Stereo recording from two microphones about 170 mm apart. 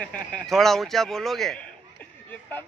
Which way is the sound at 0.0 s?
5° left (ahead or behind).